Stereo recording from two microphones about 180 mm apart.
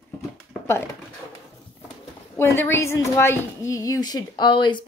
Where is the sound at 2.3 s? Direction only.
15° left (ahead or behind).